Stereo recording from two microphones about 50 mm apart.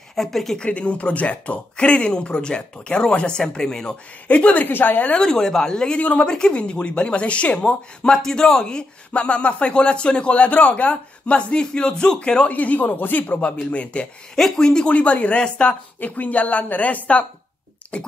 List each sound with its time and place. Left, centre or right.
0.1 s speech: centre
0.6 s speech: left
4.3 s speech: left
4.6 s a woman's voice: left
5.1 s speech: centre
5.9 s speech: left
6.2 s speech: centre; by 13.4 s left
13.5 s speech: left
14.3 s speech: centre
14.9 s speech: left
16.0 s a woman's voice: left